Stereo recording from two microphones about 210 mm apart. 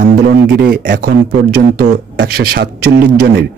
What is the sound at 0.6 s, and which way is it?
Speech, 55° right (ahead or behind).